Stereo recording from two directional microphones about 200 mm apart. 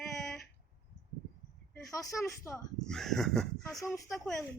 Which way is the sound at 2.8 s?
Centre (ahead or behind).